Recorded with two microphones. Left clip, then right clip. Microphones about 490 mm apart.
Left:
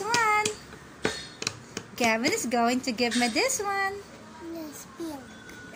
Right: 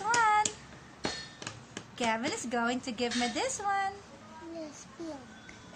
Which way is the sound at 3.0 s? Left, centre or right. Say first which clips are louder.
Left 6 dB; right.